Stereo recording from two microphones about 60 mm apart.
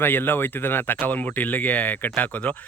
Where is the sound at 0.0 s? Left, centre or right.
Left.